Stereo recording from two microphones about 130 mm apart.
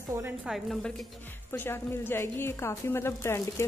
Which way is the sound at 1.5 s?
15° left (ahead or behind).